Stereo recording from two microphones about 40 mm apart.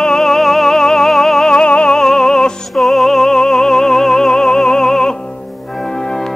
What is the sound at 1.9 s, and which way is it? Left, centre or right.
Music, centre.